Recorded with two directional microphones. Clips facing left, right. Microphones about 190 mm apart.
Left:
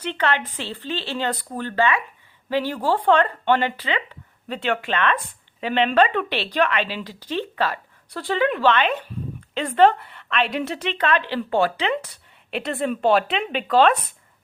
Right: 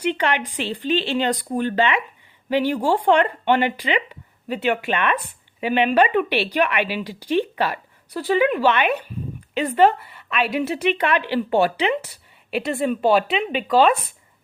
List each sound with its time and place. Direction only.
0.0 s a woman's voice: 15° right (ahead or behind)